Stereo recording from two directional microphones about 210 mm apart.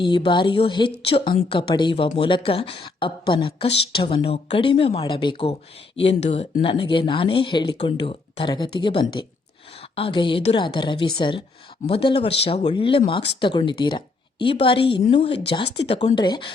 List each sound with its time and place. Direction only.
0.0 s speech: 25° left (ahead or behind)